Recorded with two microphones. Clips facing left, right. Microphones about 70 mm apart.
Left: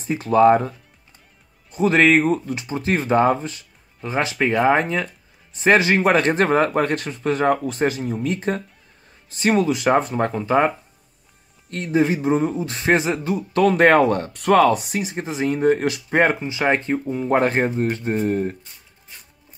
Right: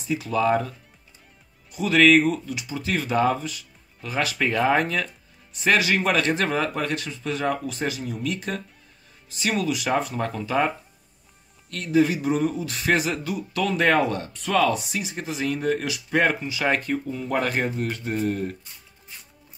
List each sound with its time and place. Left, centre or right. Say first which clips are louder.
0.0 s speech: left 8 dB; left
11.7 s speech: left 1 dB; left